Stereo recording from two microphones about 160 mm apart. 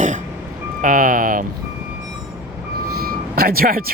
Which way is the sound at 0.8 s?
55° right (ahead or behind).